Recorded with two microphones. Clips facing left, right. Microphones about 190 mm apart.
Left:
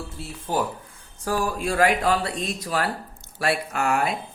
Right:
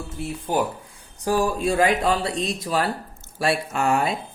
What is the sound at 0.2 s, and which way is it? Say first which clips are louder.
Speech: right 3 dB; 15° right (ahead or behind).